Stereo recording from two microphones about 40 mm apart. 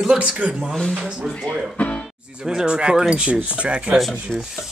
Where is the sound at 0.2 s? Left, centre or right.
Right.